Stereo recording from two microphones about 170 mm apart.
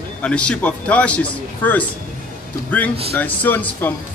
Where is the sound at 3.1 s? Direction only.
10° left (ahead or behind).